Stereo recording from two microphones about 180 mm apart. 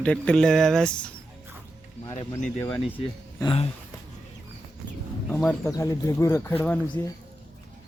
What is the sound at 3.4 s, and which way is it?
Speech, 30° left (ahead or behind).